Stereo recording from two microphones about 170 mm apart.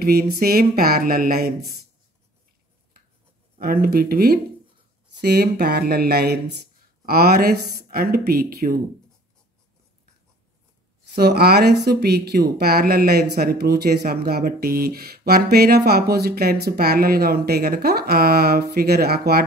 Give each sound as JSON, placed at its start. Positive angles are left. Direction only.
{"t": 0.0, "sound": "speech", "side_deg": -65}
{"t": 3.5, "sound": "speech", "side_deg": -60}
{"t": 11.1, "sound": "speech", "side_deg": -70}